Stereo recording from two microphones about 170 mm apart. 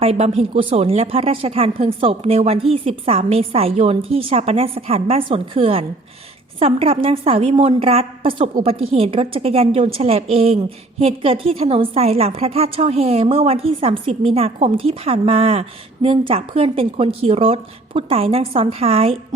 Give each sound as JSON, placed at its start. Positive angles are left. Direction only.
{"t": 0.0, "sound": "a woman's voice", "side_deg": -35}